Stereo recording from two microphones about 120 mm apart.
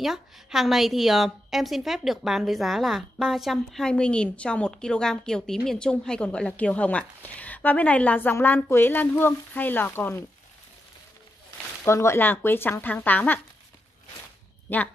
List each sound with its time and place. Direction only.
0.0 s a woman's voice: 5° right (ahead or behind); by 10.1 s 15° left (ahead or behind)
11.8 s a woman's voice: 20° left (ahead or behind)
14.7 s a woman's voice: 15° left (ahead or behind)